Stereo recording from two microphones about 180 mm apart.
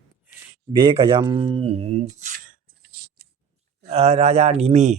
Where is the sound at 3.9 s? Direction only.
35° right (ahead or behind).